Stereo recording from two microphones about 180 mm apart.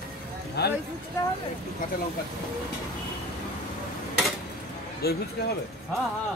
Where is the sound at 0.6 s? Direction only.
65° left (ahead or behind).